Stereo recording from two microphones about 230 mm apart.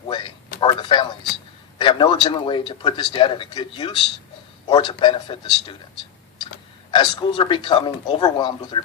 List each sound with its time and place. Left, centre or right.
0.1 s a sound: left
1.8 s speech: left
6.9 s speech: left